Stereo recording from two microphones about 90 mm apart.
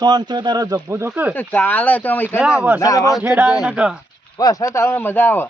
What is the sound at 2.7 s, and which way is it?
Speech, 40° left (ahead or behind).